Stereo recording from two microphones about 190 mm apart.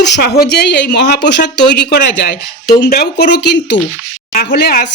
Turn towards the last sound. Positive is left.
turn(degrees=60)  # may be behind; listen again after turning